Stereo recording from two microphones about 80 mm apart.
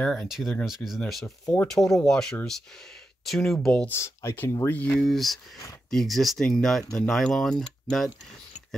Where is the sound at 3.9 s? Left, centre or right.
Left.